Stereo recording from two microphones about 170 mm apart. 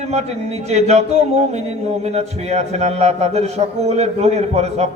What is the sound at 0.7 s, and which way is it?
A man's voice, 40° right (ahead or behind).